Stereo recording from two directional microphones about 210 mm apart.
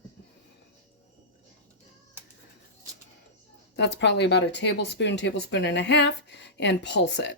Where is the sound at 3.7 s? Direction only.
55° left (ahead or behind).